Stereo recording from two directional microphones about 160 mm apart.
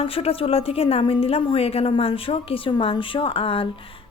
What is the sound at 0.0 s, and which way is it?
A woman's voice, 35° left (ahead or behind).